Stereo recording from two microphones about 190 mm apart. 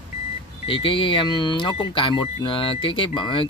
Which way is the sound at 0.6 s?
25° left (ahead or behind).